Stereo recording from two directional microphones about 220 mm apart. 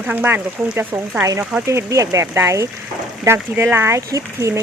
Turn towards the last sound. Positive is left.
turn(degrees=-15)  # may be behind; listen again after turning